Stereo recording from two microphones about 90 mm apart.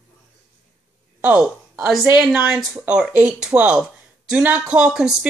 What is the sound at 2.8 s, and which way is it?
Speech, 15° right (ahead or behind).